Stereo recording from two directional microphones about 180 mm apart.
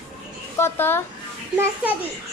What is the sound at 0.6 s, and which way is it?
Speech, 10° left (ahead or behind).